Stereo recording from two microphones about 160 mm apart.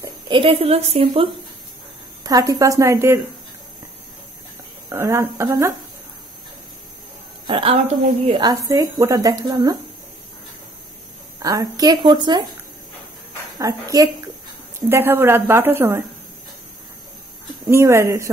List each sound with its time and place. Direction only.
0.3 s a woman's voice: 35° right (ahead or behind)
2.2 s speech: 20° right (ahead or behind)
4.8 s speech: 20° right (ahead or behind)
7.4 s a woman's voice: 35° right (ahead or behind)
8.4 s speech: 20° right (ahead or behind)
11.4 s speech: 20° right (ahead or behind)
13.6 s a woman's voice: 20° right (ahead or behind)
17.6 s a woman's voice: 15° right (ahead or behind)